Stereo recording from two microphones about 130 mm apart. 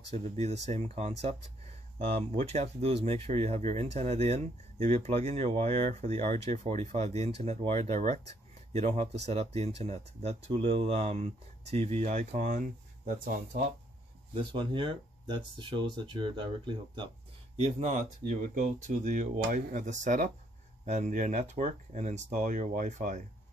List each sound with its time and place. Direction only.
0.1 s speech: 60° right (ahead or behind); by 13.6 s 90° right
14.3 s speech: 40° right (ahead or behind)
17.6 s speech: 60° right (ahead or behind)